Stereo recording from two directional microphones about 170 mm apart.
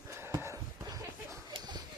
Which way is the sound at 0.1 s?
15° right (ahead or behind).